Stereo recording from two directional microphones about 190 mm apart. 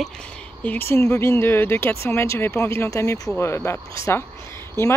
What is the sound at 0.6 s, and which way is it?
Speech, 10° left (ahead or behind).